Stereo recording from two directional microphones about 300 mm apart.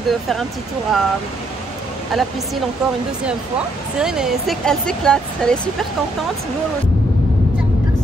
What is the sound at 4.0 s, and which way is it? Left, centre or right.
Speech, centre.